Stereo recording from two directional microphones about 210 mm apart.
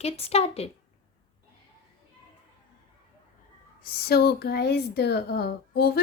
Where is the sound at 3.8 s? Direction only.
45° left (ahead or behind).